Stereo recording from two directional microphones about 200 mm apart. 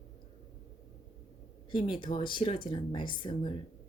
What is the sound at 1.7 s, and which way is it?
Speech, 25° left (ahead or behind).